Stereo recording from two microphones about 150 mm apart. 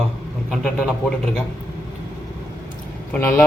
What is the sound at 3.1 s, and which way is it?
Speech, 15° left (ahead or behind).